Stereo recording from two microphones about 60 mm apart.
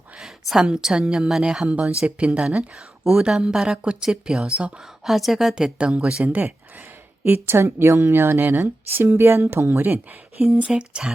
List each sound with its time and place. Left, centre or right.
0.2 s a sound: centre
0.6 s speech: centre
2.7 s speech: centre
6.2 s speech: right
7.3 s a woman's voice: right
9.8 s a woman's voice: right
10.7 s speech: centre